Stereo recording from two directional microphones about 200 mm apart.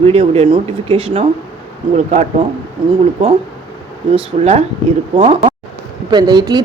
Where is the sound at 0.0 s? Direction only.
30° right (ahead or behind).